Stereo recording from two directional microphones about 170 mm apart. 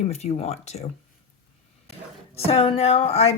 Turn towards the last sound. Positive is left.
turn(degrees=35)  # may be behind; listen again after turning